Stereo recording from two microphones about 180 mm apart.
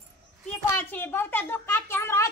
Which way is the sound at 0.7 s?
10° left (ahead or behind).